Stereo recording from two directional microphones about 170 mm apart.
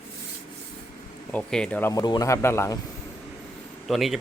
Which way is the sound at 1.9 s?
20° left (ahead or behind).